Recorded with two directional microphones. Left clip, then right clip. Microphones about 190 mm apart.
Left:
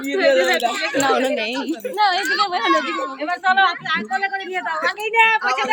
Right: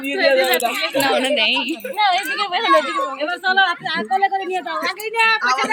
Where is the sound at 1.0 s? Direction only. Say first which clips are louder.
Right 2 dB; 40° left (ahead or behind).